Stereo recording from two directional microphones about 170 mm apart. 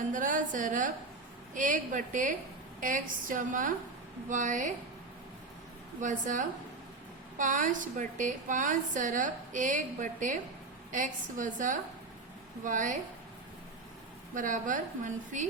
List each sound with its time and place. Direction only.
0.1 s a woman's voice: 50° right (ahead or behind)
6.0 s a woman's voice: 50° right (ahead or behind)
14.3 s a woman's voice: 50° right (ahead or behind)